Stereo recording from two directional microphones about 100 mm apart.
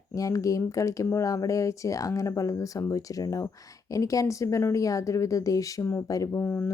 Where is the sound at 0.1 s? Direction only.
35° left (ahead or behind).